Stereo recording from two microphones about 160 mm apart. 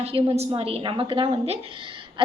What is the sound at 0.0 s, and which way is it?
A woman's voice, 35° right (ahead or behind).